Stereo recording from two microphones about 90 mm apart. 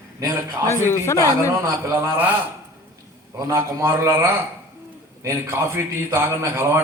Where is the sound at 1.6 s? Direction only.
30° right (ahead or behind).